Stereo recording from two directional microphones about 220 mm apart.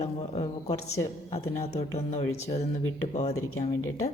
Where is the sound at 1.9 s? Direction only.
30° left (ahead or behind).